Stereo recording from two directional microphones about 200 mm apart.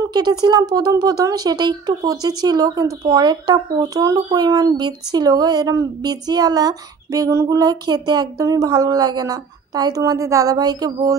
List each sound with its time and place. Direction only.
0.0 s speech: 20° right (ahead or behind)